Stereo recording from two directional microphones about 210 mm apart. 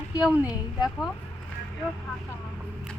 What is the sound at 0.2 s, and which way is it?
Speech, 5° right (ahead or behind).